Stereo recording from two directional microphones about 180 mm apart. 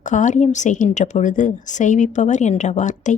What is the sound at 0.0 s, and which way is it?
A woman's voice, 45° left (ahead or behind).